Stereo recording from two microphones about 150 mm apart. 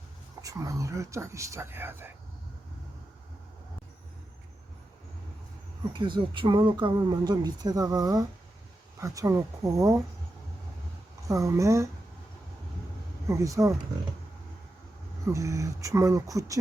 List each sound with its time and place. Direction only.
0.4 s speech: 20° right (ahead or behind)
5.9 s speech: 30° right (ahead or behind)
11.3 s speech: 20° right (ahead or behind)
13.2 s speech: 20° right (ahead or behind)
15.3 s speech: 20° right (ahead or behind)